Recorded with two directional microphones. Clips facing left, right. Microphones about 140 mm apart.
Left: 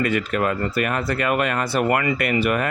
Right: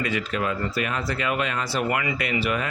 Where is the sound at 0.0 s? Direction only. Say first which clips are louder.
Left 5 dB; 55° left (ahead or behind).